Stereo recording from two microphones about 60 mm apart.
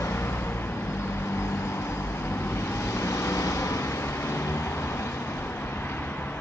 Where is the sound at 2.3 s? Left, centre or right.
Left.